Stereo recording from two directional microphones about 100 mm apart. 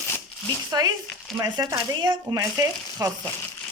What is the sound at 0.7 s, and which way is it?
Speech, 40° right (ahead or behind).